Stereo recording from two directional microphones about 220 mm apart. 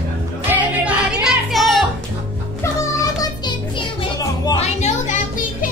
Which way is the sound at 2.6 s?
10° left (ahead or behind).